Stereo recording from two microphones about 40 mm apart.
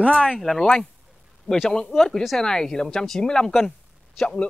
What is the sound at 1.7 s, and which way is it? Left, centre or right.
Speech, centre.